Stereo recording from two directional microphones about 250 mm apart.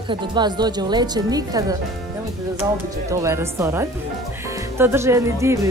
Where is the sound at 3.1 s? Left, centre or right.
Centre.